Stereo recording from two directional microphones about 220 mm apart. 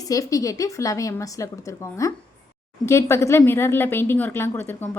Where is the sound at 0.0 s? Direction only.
15° left (ahead or behind).